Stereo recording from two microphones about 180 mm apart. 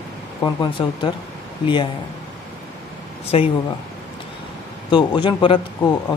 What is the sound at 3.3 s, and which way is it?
Speech, 30° left (ahead or behind).